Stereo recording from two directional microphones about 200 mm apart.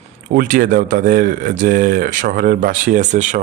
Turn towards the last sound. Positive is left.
turn(degrees=-35)  # may be behind; listen again after turning